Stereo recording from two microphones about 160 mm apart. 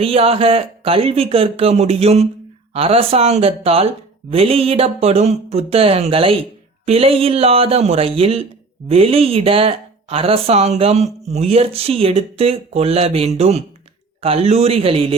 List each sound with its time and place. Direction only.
0.0 s speech: 35° right (ahead or behind)